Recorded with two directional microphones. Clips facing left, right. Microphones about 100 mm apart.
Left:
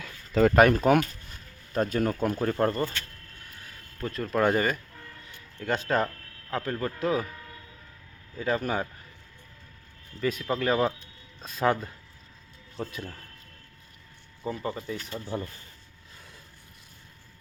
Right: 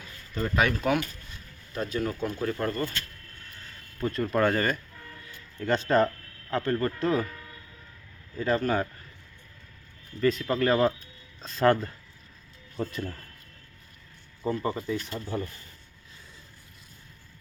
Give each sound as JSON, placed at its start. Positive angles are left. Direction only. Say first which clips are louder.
{"t": 0.0, "sound": "a sound", "louder": "left 10 dB", "side_deg": 90}
{"t": 0.5, "sound": "speech", "louder": "left 4 dB", "side_deg": 45}
{"t": 4.0, "sound": "speech", "louder": "right 2 dB", "side_deg": 0}
{"t": 4.4, "sound": "speech", "louder": "left 1 dB", "side_deg": 10}
{"t": 8.4, "sound": "speech", "louder": "right 2 dB", "side_deg": 10}
{"t": 10.2, "sound": "speech", "louder": "right 3 dB", "side_deg": 5}
{"t": 14.4, "sound": "speech", "louder": "right 3 dB", "side_deg": 0}